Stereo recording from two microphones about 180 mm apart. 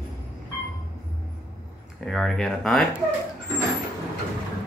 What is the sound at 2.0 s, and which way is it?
Speech, centre (ahead or behind).